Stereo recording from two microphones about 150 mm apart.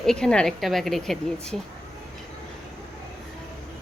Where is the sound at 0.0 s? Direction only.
5° left (ahead or behind).